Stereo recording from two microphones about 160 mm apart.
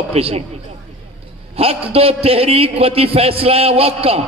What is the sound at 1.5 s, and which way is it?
A man's voice, 35° right (ahead or behind).